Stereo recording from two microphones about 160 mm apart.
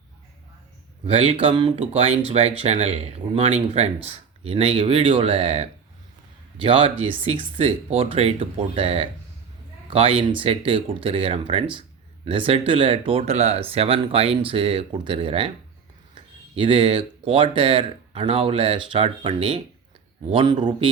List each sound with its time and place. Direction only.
1.0 s speech: 35° right (ahead or behind)